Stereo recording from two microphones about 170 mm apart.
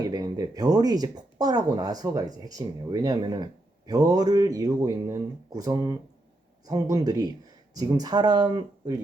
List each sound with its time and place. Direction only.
0.0 s speech: 25° right (ahead or behind)